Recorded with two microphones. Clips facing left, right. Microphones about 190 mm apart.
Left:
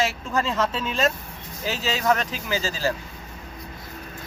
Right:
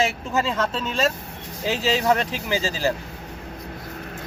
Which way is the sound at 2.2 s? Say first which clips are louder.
Right 3 dB; 15° right (ahead or behind).